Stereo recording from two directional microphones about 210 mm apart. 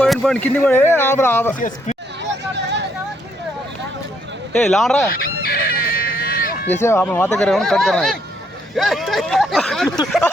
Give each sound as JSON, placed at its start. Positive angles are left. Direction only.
{"t": 0.0, "sound": "speech", "side_deg": 5}
{"t": 1.5, "sound": "speech", "side_deg": 40}
{"t": 2.2, "sound": "hubbub", "side_deg": -55}
{"t": 4.5, "sound": "speech", "side_deg": 5}
{"t": 5.1, "sound": "fowl", "side_deg": 45}
{"t": 6.7, "sound": "speech", "side_deg": 10}